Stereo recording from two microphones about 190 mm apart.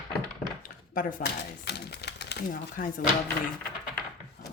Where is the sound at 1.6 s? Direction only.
60° left (ahead or behind).